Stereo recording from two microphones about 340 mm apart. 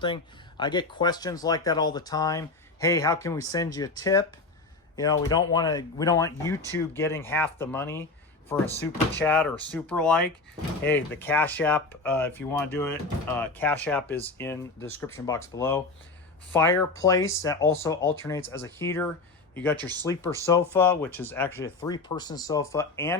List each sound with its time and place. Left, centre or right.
0.0 s speech: centre